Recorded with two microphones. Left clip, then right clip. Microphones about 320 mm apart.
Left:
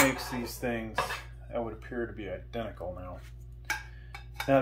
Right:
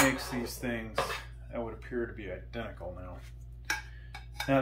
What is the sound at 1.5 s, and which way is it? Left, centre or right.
Speech, centre.